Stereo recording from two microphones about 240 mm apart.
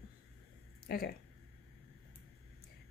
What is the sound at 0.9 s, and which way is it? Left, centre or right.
Speech, left.